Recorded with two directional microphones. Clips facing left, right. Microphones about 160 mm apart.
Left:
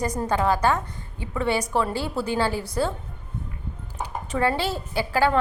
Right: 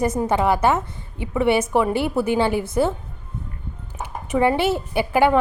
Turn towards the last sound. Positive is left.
turn(degrees=-20)  # may be behind; listen again after turning